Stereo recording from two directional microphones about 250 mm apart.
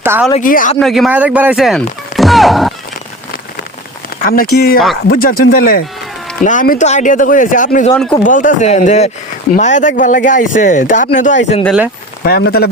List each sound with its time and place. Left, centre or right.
0.0 s speech: centre
0.3 s speech: left
0.8 s speech: centre
4.3 s speech: left
11.6 s speech: centre
12.2 s speech: left